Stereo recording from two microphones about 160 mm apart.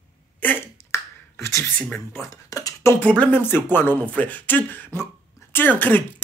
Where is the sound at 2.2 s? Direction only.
20° left (ahead or behind).